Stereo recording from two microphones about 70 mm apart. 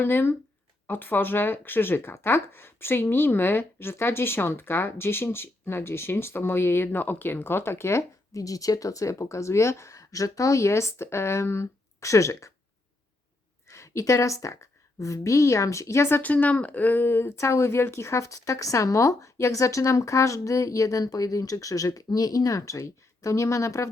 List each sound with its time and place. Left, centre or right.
0.0 s speech: left
13.7 s a woman's voice: left
16.2 s speech: left